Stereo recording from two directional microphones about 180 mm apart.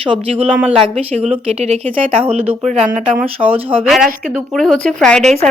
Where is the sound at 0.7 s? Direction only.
30° right (ahead or behind).